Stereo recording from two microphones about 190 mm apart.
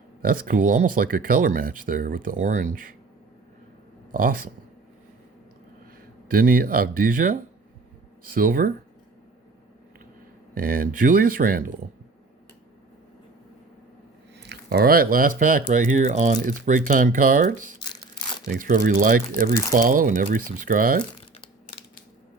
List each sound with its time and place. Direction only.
0.2 s speech: 50° right (ahead or behind)
4.1 s speech: 45° right (ahead or behind)
6.2 s speech: 50° right (ahead or behind)
10.5 s speech: 50° right (ahead or behind)
14.4 s speech: 60° right (ahead or behind)